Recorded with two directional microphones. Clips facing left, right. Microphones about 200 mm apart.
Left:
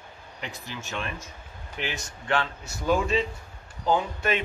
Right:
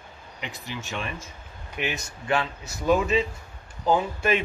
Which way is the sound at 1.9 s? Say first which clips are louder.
Even; 5° right (ahead or behind).